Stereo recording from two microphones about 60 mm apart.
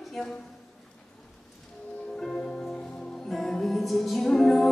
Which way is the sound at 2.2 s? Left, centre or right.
Centre.